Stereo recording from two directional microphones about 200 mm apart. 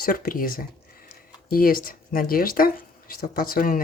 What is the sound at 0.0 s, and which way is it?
Speech, 45° left (ahead or behind).